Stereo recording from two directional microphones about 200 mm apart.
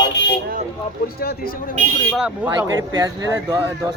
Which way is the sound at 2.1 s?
5° right (ahead or behind).